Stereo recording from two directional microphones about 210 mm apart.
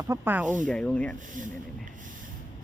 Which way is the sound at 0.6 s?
5° left (ahead or behind).